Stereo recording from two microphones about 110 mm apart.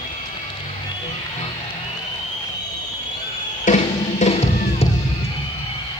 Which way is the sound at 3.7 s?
90° left.